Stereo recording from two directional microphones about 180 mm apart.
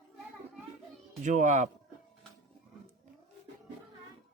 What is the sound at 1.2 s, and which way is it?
Speech, 45° right (ahead or behind).